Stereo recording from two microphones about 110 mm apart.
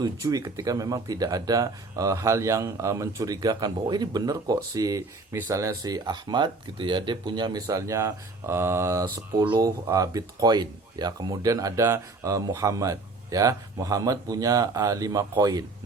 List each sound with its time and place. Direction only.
0.0 s speech: 35° right (ahead or behind)
7.7 s speech: 30° right (ahead or behind)